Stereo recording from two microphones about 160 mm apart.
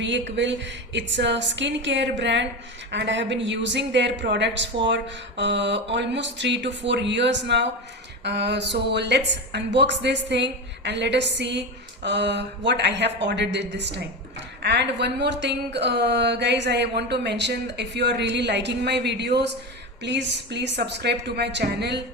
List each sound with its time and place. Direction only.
0.3 s speech: 90° right